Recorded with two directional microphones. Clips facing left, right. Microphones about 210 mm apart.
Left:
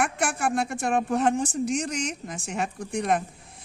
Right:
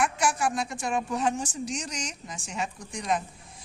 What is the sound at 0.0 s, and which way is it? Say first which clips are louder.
A woman's voice: even; 55° left (ahead or behind).